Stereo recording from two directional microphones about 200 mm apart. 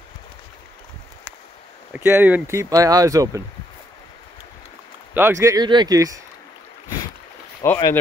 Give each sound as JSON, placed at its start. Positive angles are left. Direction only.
{"t": 1.9, "sound": "speech", "side_deg": -10}
{"t": 5.1, "sound": "speech", "side_deg": -10}
{"t": 7.6, "sound": "speech", "side_deg": 10}